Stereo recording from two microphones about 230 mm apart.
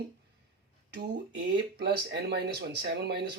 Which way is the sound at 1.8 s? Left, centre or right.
Right.